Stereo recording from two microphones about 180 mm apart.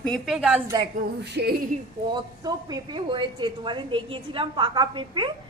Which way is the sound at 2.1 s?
20° right (ahead or behind).